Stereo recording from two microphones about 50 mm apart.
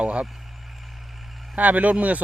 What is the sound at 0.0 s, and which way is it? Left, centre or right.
Speech, right.